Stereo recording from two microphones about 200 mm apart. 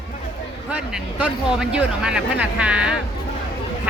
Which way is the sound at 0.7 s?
5° right (ahead or behind).